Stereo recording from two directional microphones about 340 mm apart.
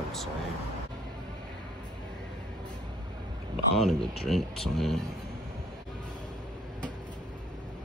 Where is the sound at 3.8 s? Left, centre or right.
Centre.